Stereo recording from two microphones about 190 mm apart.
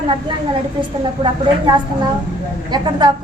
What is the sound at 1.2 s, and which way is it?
A woman's voice, 25° right (ahead or behind).